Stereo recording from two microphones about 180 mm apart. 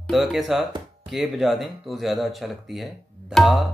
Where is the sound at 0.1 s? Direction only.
Centre (ahead or behind).